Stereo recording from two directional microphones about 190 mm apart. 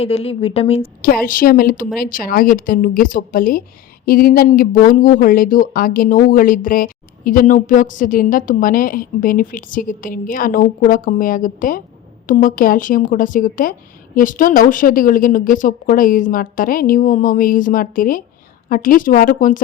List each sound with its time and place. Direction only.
0.0 s a woman's voice: 30° left (ahead or behind)
1.0 s speech: 50° left (ahead or behind)